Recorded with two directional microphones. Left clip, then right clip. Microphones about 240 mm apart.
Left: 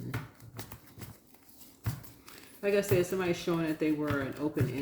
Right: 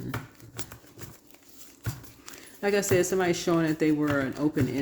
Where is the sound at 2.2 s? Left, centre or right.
Right.